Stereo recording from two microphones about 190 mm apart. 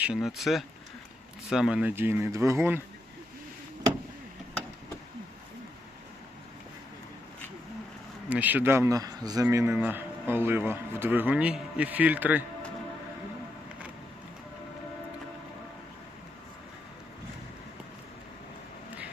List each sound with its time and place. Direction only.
0.0 s a man's voice: 5° right (ahead or behind)
8.3 s a man's voice: 10° right (ahead or behind)